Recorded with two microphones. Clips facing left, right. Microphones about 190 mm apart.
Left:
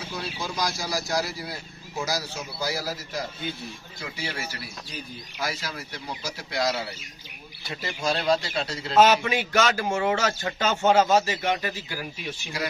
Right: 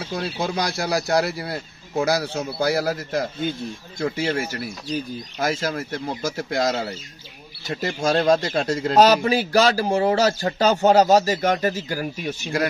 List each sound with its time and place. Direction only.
0.1 s a man's voice: 60° right (ahead or behind); by 12.6 s 45° right (ahead or behind)